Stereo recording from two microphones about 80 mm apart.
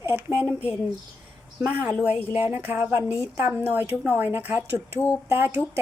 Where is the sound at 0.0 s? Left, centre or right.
Right.